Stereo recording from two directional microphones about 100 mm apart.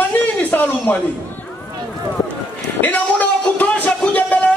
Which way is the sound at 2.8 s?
15° left (ahead or behind).